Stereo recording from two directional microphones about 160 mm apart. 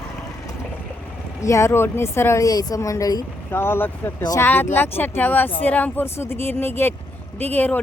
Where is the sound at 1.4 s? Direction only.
20° left (ahead or behind).